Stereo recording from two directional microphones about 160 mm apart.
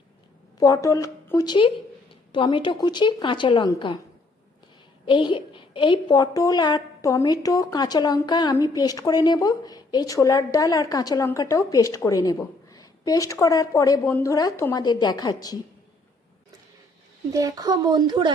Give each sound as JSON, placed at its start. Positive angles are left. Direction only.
{"t": 0.6, "sound": "a woman's voice", "side_deg": 20}
{"t": 5.0, "sound": "a woman's voice", "side_deg": 30}
{"t": 17.3, "sound": "speech", "side_deg": -20}